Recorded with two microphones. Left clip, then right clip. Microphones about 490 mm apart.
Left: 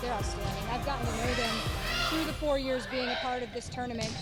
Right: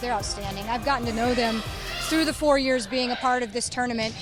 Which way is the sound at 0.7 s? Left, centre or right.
Right.